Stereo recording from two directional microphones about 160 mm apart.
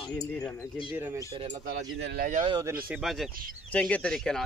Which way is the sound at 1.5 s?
75° right (ahead or behind).